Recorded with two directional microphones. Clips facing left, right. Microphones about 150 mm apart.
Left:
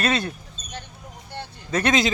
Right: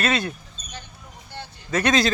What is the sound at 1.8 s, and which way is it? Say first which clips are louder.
Speech: right 1 dB; 20° left (ahead or behind).